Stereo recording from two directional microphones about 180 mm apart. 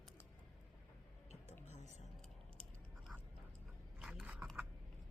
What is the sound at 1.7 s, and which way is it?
Speech, 40° left (ahead or behind).